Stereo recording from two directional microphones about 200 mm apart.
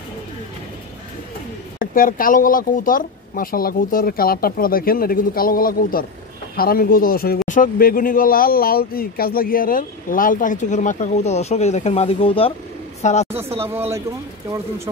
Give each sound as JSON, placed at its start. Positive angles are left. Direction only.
{"t": 1.8, "sound": "a woman's voice", "side_deg": 45}
{"t": 13.6, "sound": "speech", "side_deg": -10}